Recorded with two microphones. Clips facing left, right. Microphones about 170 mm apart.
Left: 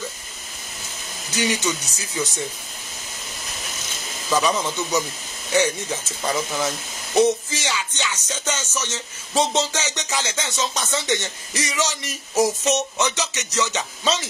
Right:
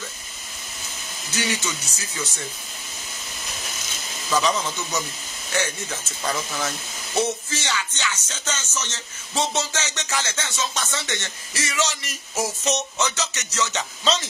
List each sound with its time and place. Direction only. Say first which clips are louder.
1.3 s music: left 4 dB; 20° left (ahead or behind)
4.3 s music: left 2 dB; 10° left (ahead or behind)